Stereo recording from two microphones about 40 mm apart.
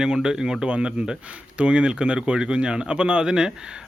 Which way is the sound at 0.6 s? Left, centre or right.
Right.